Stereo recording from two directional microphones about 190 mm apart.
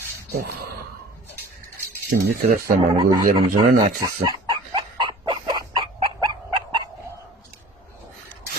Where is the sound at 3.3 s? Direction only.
25° right (ahead or behind).